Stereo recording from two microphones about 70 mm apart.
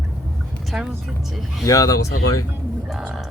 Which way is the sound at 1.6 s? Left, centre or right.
Left.